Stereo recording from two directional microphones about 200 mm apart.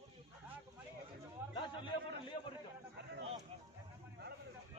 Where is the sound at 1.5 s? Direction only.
25° left (ahead or behind).